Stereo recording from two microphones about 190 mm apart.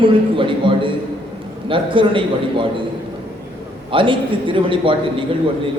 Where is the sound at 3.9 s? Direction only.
25° right (ahead or behind).